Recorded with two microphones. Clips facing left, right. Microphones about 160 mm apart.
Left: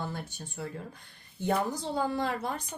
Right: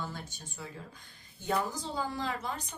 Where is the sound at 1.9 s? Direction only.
60° left (ahead or behind).